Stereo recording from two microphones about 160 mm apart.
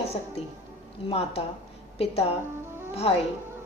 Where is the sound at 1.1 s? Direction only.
40° left (ahead or behind).